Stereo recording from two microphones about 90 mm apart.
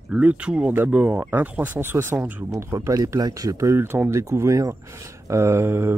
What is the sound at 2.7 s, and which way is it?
Speech, 35° right (ahead or behind).